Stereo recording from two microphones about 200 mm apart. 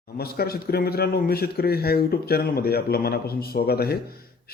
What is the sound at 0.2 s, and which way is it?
Speech, 50° left (ahead or behind).